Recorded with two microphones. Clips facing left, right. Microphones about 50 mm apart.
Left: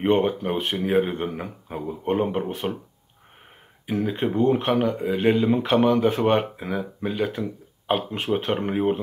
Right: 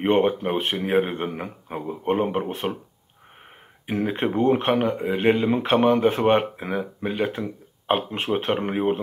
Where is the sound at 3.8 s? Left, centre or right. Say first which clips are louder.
Even; right.